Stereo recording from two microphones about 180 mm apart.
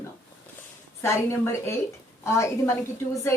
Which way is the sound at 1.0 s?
15° left (ahead or behind).